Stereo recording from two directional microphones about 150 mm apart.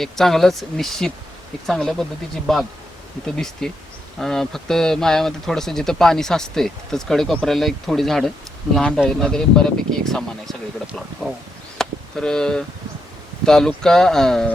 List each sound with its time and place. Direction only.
0.0 s speech: centre (ahead or behind)
11.8 s a sound: 5° left (ahead or behind)
13.4 s speech: 5° left (ahead or behind)